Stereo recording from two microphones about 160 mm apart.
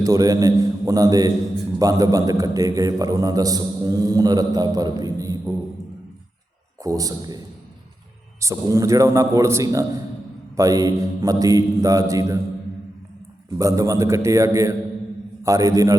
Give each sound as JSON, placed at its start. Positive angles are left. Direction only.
{"t": 0.0, "sound": "a man's voice", "side_deg": -20}
{"t": 6.8, "sound": "a man's voice", "side_deg": -20}
{"t": 13.5, "sound": "a man's voice", "side_deg": -20}